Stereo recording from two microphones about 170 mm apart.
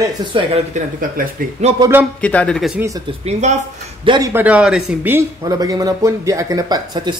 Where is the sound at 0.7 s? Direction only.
55° right (ahead or behind).